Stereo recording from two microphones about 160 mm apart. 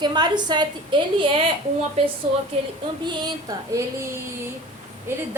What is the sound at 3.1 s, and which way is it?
A woman's voice, 30° right (ahead or behind).